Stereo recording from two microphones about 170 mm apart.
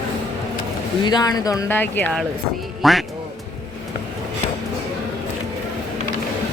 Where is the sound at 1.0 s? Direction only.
25° left (ahead or behind).